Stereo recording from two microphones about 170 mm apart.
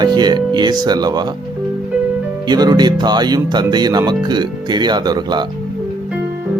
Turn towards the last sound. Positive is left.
turn(degrees=-25)  # may be behind; listen again after turning